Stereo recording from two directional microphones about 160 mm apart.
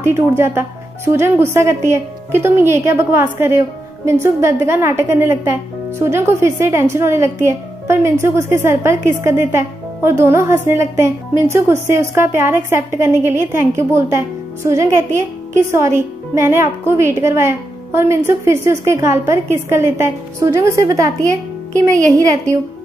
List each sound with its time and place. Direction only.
0.0 s speech: 15° right (ahead or behind)